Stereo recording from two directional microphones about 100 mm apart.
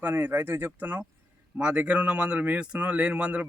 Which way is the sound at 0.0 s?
20° right (ahead or behind).